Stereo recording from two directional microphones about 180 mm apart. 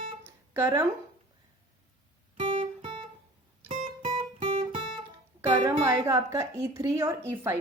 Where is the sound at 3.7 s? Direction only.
45° right (ahead or behind).